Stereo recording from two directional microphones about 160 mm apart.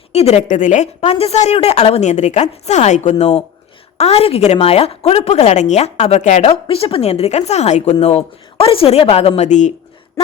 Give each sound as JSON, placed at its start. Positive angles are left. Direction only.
{"t": 0.1, "sound": "a woman's voice", "side_deg": 40}